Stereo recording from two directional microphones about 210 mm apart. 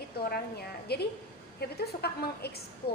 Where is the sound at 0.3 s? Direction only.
50° left (ahead or behind).